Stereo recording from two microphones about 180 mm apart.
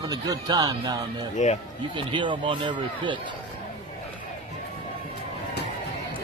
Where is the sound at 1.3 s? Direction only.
40° left (ahead or behind).